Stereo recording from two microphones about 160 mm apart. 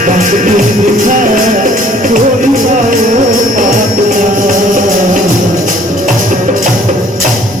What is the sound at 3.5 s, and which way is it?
Music, 55° right (ahead or behind).